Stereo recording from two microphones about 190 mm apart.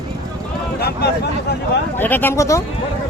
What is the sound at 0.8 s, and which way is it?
Speech, 55° left (ahead or behind).